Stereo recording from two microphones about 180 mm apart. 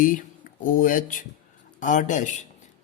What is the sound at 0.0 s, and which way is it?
Speech, 45° left (ahead or behind).